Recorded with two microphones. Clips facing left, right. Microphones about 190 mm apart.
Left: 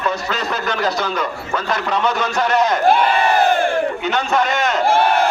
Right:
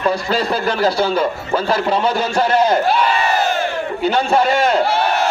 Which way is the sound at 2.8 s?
50° left (ahead or behind).